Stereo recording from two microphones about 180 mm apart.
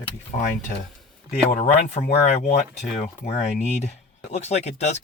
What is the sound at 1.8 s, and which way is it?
Speech, 40° left (ahead or behind).